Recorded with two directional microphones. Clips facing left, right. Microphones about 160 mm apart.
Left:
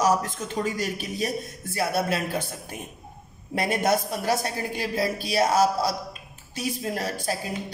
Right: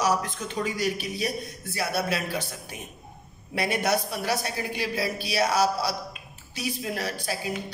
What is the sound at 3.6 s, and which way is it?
A woman's voice, 45° left (ahead or behind).